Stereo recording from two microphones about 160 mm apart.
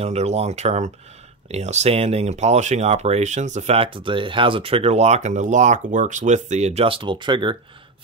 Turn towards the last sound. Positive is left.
turn(degrees=-30)  # may be behind; listen again after turning